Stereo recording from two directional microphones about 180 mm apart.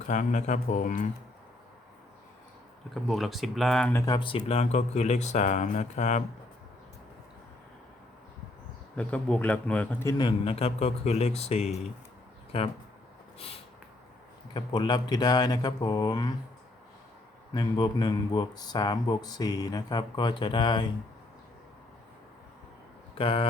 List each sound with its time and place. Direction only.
0.1 s speech: 45° left (ahead or behind)
2.9 s speech: centre (ahead or behind)
3.9 s speech: 20° left (ahead or behind); by 6.2 s 40° left (ahead or behind)
9.0 s speech: 5° left (ahead or behind); by 12.7 s 35° left (ahead or behind)
14.5 s speech: 25° left (ahead or behind)
17.5 s speech: 25° left (ahead or behind)
23.1 s speech: 30° left (ahead or behind)